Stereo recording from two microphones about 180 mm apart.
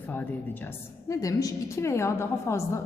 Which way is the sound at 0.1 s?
10° left (ahead or behind).